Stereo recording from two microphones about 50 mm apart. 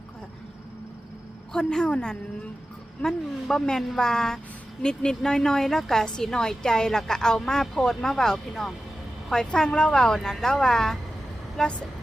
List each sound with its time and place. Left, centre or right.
1.5 s a woman's voice: centre
3.5 s a woman's voice: centre